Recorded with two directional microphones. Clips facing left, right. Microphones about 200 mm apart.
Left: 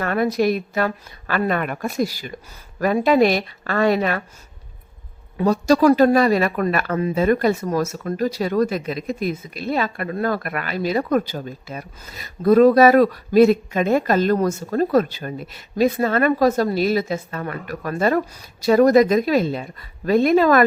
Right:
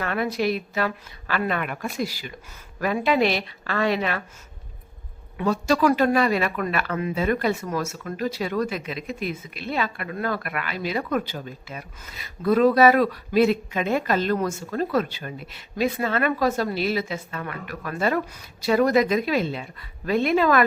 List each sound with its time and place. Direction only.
0.0 s a woman's voice: 45° left (ahead or behind)
5.4 s speech: 40° left (ahead or behind)